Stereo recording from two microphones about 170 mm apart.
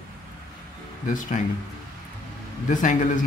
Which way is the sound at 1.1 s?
50° left (ahead or behind).